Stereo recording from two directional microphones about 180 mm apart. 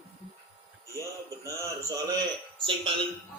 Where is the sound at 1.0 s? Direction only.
20° right (ahead or behind).